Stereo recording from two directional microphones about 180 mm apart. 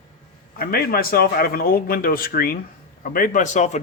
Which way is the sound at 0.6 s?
55° left (ahead or behind).